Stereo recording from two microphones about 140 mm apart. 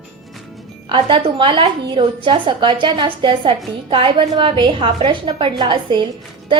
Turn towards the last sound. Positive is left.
turn(degrees=-35)  # may be behind; listen again after turning